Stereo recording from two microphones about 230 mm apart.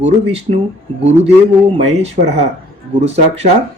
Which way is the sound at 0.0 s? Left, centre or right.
Right.